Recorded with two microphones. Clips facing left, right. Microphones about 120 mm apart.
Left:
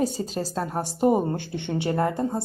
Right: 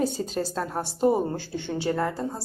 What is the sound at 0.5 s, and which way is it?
A woman's voice, 10° left (ahead or behind).